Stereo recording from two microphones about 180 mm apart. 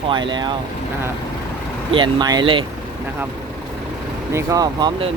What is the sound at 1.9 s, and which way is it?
Speech, 25° right (ahead or behind).